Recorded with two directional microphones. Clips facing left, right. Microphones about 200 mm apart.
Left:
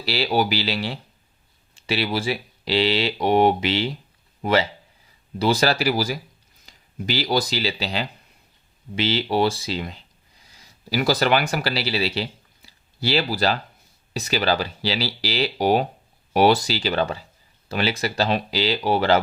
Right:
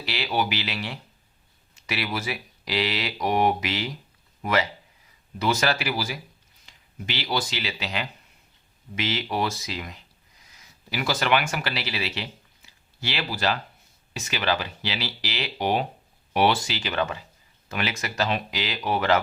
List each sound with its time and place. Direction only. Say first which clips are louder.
0.0 s speech: left 5 dB; 35° left (ahead or behind)